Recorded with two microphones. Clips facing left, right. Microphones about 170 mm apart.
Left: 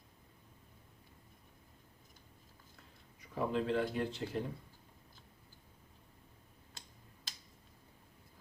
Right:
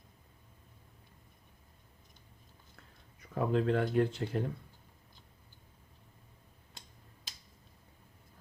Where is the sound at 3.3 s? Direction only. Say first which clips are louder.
Right 4 dB; 55° right (ahead or behind).